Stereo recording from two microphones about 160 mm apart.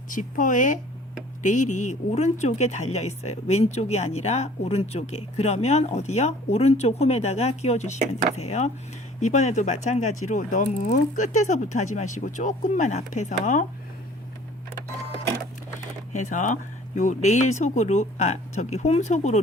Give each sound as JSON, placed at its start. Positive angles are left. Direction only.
{"t": 0.1, "sound": "speech", "side_deg": 55}
{"t": 16.1, "sound": "speech", "side_deg": 50}